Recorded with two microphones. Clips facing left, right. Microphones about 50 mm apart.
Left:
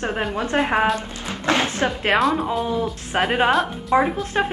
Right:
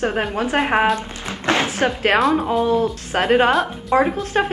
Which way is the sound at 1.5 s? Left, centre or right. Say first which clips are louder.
Right 1 dB; right.